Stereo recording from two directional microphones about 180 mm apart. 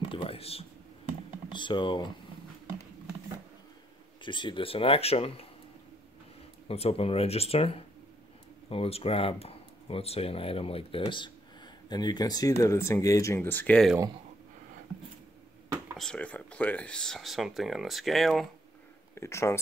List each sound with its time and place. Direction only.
0.1 s computer keyboard: 30° left (ahead or behind)
1.5 s speech: 25° left (ahead or behind)
4.2 s speech: 25° left (ahead or behind)
6.7 s speech: 35° left (ahead or behind); by 13.9 s 5° left (ahead or behind)
16.0 s speech: 5° left (ahead or behind)
19.1 s speech: 15° left (ahead or behind)